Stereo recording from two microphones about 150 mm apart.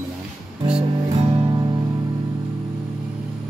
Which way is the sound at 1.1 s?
45° right (ahead or behind).